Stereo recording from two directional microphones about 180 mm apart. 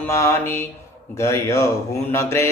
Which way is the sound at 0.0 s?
15° left (ahead or behind).